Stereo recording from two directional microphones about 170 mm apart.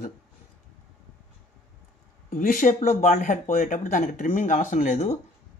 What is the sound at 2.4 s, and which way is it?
Speech, 60° left (ahead or behind).